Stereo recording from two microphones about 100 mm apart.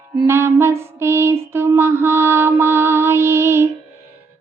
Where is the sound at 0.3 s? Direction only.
25° right (ahead or behind).